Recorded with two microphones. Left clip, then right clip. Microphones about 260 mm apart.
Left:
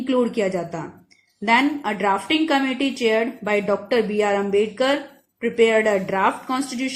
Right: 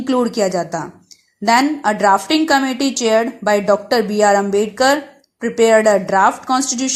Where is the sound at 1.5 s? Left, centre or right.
Right.